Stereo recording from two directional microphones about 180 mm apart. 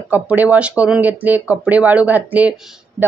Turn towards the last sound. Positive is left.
turn(degrees=-10)  # may be behind; listen again after turning